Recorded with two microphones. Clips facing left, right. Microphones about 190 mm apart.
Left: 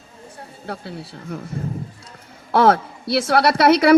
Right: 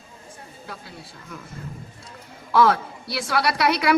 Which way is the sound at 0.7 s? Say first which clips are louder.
Left 10 dB; 65° left (ahead or behind).